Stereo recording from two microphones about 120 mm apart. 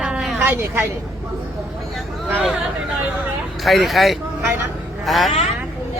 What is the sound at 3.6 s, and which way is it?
Speech, centre (ahead or behind).